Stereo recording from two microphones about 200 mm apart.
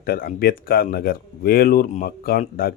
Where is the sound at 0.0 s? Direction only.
45° left (ahead or behind).